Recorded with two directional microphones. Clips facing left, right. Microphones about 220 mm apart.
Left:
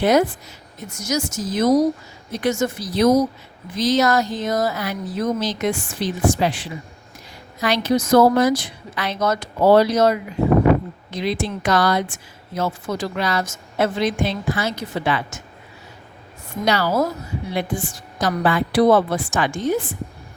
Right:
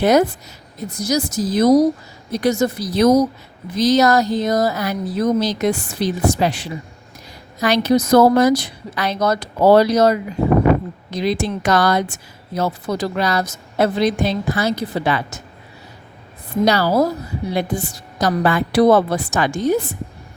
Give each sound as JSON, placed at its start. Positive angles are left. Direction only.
{"t": 0.0, "sound": "a woman's voice", "side_deg": -40}
{"t": 16.5, "sound": "a woman's voice", "side_deg": -35}